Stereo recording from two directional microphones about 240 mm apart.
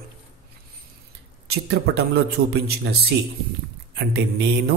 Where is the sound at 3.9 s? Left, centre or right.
Right.